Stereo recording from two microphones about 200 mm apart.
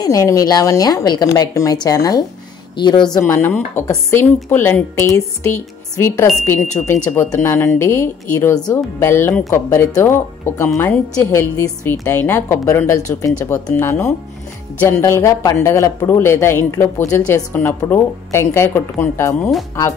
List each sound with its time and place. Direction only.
0.0 s a woman's voice: 15° left (ahead or behind)
3.1 s a woman's voice: 10° left (ahead or behind)